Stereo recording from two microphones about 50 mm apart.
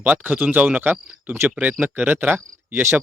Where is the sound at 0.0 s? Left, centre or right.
Right.